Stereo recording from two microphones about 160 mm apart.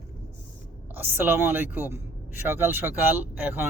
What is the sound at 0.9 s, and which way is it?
Speech, 15° right (ahead or behind).